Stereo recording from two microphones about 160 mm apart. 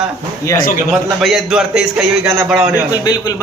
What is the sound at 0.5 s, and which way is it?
Speech, 60° left (ahead or behind).